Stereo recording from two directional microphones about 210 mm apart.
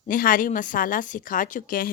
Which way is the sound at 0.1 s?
40° left (ahead or behind).